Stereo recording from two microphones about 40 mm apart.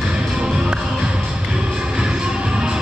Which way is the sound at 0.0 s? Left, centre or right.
Centre.